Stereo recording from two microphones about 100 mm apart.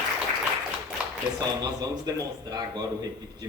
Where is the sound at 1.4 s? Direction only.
40° right (ahead or behind).